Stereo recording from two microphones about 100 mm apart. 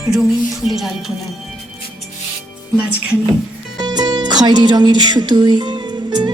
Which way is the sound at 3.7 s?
45° right (ahead or behind).